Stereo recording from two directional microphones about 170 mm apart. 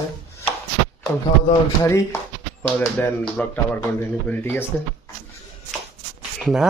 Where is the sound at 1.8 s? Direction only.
15° left (ahead or behind).